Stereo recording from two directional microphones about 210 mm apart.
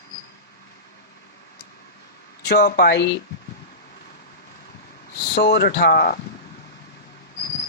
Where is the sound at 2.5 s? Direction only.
50° left (ahead or behind).